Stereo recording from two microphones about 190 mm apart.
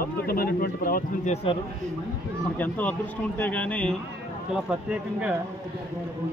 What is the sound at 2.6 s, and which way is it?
A man's voice, 10° left (ahead or behind).